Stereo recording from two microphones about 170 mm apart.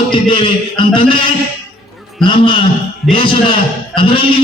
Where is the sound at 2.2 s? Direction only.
30° left (ahead or behind).